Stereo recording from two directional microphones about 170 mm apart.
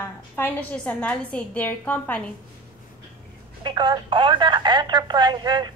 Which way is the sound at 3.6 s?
25° right (ahead or behind).